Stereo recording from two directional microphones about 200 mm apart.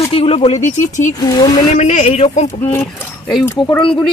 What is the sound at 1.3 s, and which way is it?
Speech, 20° left (ahead or behind).